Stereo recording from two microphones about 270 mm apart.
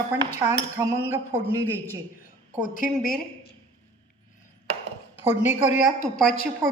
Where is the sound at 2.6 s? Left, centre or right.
Left.